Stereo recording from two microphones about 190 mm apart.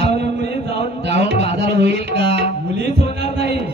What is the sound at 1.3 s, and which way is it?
Music, 60° right (ahead or behind).